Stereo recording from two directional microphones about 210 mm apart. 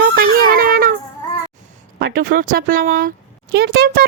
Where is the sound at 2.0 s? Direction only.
40° right (ahead or behind).